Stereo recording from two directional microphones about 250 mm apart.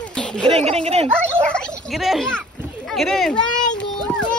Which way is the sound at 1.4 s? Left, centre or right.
Centre.